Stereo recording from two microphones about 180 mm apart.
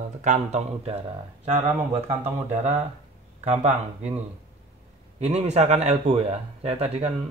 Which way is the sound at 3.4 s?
40° right (ahead or behind).